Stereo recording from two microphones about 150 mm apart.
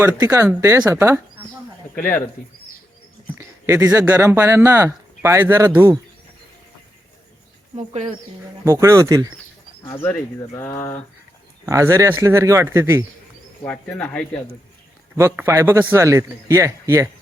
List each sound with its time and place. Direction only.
0.0 s a man's voice: 20° right (ahead or behind)
3.3 s speech: 15° right (ahead or behind)
8.6 s a man's voice: 20° right (ahead or behind)
10.5 s speech: 20° left (ahead or behind)
11.6 s a man's voice: 20° right (ahead or behind)
13.7 s speech: 5° left (ahead or behind)
15.1 s a man's voice: 15° right (ahead or behind)